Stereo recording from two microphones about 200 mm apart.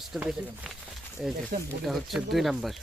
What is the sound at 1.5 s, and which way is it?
Speech, 45° right (ahead or behind).